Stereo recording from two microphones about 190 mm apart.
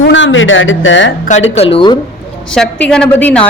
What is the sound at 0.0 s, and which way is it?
Speech, 75° left (ahead or behind).